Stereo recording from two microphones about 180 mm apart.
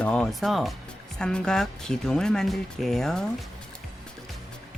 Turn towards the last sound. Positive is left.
turn(degrees=0)  # may be behind; listen again after turning